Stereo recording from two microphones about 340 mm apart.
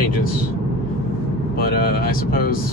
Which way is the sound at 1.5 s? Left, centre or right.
Left.